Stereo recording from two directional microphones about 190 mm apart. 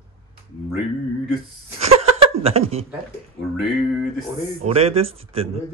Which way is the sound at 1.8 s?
30° right (ahead or behind).